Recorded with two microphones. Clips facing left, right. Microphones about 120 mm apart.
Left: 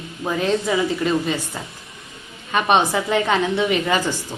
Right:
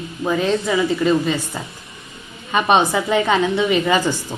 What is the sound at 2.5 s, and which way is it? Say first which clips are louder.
A woman's voice: right 2 dB; 5° right (ahead or behind).